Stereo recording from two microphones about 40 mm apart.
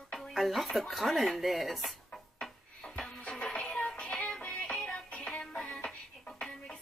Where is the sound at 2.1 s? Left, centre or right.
Centre.